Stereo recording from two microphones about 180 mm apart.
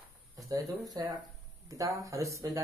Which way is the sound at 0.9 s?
20° right (ahead or behind).